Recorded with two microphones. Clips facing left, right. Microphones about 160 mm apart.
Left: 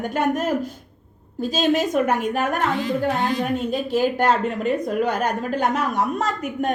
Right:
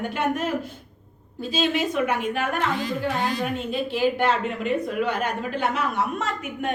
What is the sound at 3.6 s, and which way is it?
Speech, 40° left (ahead or behind).